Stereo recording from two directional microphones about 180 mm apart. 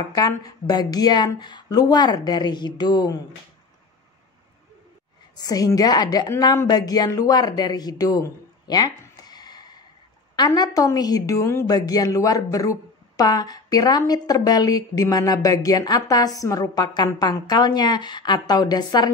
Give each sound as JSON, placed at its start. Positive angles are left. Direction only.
{"t": 0.1, "sound": "a woman's voice", "side_deg": 20}
{"t": 5.3, "sound": "a woman's voice", "side_deg": 20}